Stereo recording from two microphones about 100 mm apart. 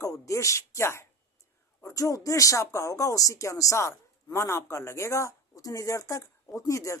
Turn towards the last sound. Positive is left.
turn(degrees=30)  # may be behind; listen again after turning